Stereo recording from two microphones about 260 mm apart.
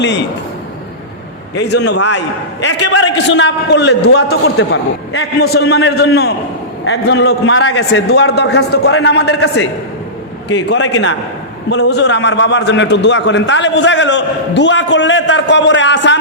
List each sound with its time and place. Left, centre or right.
1.6 s a man's voice: left